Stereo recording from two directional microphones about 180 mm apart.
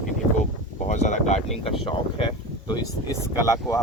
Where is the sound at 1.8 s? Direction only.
30° left (ahead or behind).